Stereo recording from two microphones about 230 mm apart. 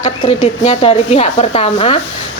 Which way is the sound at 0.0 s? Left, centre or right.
Left.